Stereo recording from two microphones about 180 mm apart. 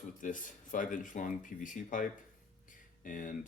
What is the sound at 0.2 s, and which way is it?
Speech, 45° left (ahead or behind).